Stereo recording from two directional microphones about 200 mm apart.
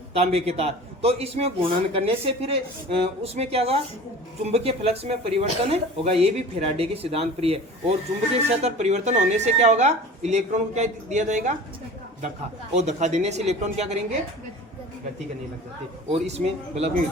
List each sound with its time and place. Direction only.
0.1 s a man's voice: 30° right (ahead or behind)
12.7 s a man's voice: 35° right (ahead or behind)
16.0 s a man's voice: 30° right (ahead or behind)